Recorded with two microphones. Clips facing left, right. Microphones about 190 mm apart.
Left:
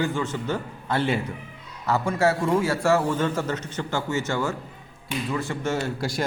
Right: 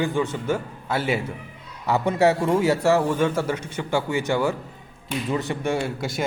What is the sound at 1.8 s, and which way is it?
A man's voice, 20° right (ahead or behind).